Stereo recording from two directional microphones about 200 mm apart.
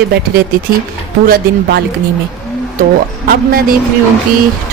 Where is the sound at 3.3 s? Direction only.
45° right (ahead or behind).